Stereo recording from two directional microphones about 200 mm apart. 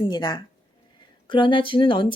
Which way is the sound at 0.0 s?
20° left (ahead or behind).